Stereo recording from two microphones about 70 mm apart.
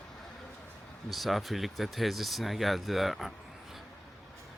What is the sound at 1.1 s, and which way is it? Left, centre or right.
Speech, centre.